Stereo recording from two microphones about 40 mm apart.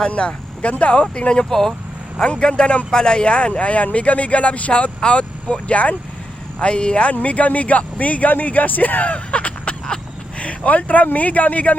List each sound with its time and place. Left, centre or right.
0.1 s speech: left
7.1 s speech: left